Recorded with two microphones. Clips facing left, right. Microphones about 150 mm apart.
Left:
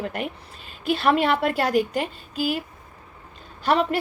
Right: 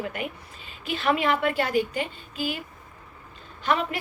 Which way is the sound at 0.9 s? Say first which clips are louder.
Left 4 dB; 35° left (ahead or behind).